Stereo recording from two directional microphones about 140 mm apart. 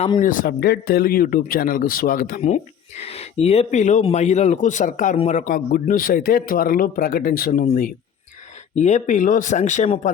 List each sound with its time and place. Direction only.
0.2 s a man's voice: 70° left (ahead or behind)
3.0 s speech: 50° left (ahead or behind); by 5.1 s 65° left (ahead or behind)
5.1 s speech: 45° left (ahead or behind)
5.4 s a man's voice: 85° left
8.7 s speech: 55° left (ahead or behind)